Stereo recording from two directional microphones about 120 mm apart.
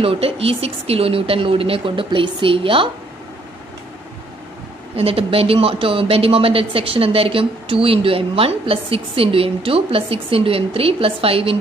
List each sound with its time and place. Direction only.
0.0 s speech: 55° right (ahead or behind)
4.9 s speech: 55° right (ahead or behind)